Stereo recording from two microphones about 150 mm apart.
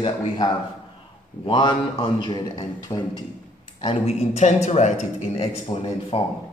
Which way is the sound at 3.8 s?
45° left (ahead or behind).